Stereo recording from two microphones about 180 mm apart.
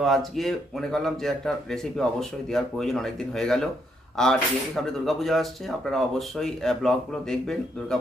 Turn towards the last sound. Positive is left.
turn(degrees=0)  # may be behind; listen again after turning